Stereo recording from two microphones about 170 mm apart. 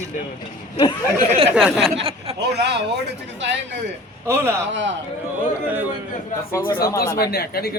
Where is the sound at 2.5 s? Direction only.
85° right.